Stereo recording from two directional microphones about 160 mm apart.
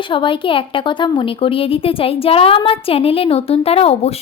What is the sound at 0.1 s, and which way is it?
A woman's voice, 30° left (ahead or behind).